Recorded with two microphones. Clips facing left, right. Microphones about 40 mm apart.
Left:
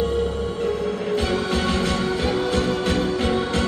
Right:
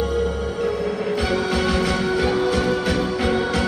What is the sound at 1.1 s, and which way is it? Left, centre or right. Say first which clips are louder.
Music: even; left.